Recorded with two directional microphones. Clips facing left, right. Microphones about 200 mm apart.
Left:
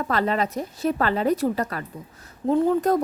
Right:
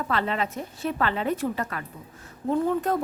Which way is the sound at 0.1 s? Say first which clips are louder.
Left 4 dB; 40° left (ahead or behind).